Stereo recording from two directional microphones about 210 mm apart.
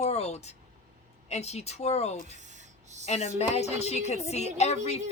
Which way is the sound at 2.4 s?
35° right (ahead or behind).